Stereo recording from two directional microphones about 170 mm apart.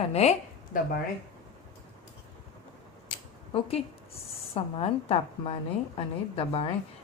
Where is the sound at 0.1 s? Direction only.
40° left (ahead or behind).